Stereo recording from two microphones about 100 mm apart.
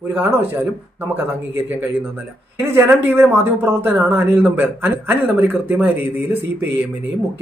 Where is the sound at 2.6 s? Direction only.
25° right (ahead or behind).